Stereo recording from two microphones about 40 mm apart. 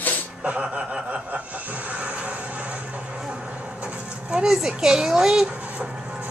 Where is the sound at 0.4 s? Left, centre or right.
Right.